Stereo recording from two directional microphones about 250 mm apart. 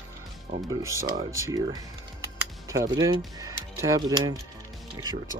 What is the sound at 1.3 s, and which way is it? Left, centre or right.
Speech, centre.